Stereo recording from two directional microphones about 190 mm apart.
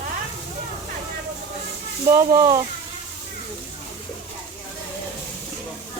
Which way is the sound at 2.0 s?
15° right (ahead or behind).